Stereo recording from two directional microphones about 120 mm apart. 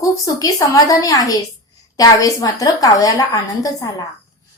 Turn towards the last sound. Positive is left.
turn(degrees=30)  # may be behind; listen again after turning